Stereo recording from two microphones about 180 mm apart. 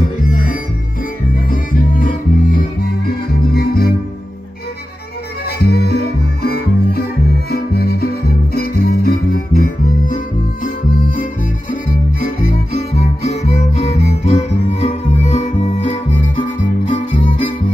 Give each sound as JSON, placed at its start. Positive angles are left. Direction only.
{"t": 1.5, "sound": "music", "side_deg": 50}
{"t": 5.6, "sound": "music", "side_deg": 60}
{"t": 12.9, "sound": "music", "side_deg": 35}